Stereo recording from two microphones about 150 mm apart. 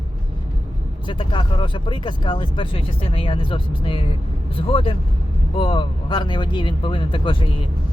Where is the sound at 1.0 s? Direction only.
35° left (ahead or behind).